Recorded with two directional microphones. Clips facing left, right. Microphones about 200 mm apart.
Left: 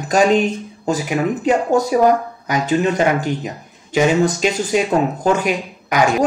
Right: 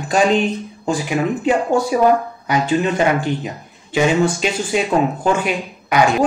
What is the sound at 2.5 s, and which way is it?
Speech, 40° left (ahead or behind).